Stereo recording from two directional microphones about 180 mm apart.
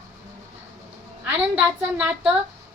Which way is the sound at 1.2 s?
5° right (ahead or behind).